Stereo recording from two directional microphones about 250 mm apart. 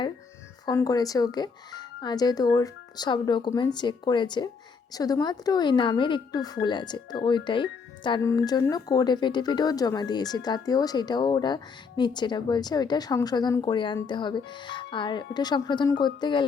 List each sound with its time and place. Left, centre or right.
0.6 s speech: centre